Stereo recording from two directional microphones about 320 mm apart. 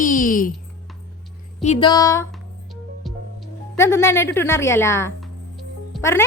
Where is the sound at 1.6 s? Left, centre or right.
Centre.